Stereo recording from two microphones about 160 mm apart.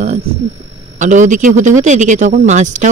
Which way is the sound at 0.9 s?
50° right (ahead or behind).